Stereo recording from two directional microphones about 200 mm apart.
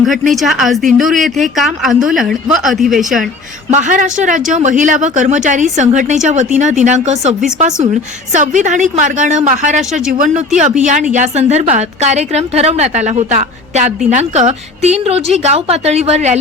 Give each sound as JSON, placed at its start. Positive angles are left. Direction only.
{"t": 0.0, "sound": "speech", "side_deg": 0}
{"t": 3.7, "sound": "a woman's voice", "side_deg": -40}